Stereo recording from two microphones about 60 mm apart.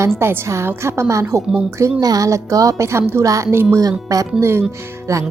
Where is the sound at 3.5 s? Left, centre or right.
Right.